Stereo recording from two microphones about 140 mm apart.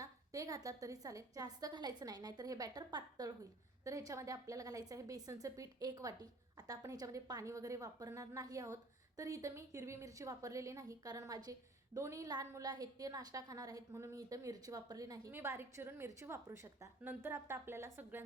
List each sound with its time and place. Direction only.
0.0 s a woman's voice: 25° right (ahead or behind)